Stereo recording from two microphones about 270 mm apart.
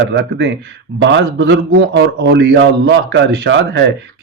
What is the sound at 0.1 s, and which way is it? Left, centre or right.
A man's voice, right.